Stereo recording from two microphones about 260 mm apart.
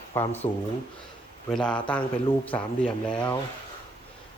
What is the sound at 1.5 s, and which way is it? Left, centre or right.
Speech, centre.